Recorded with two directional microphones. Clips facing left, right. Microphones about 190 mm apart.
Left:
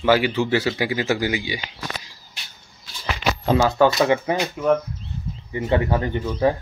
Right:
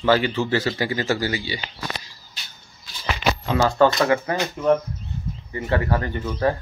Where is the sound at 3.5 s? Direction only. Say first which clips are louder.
Left 1 dB; 10° left (ahead or behind).